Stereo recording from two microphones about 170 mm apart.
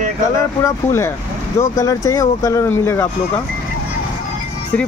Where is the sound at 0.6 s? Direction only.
15° left (ahead or behind).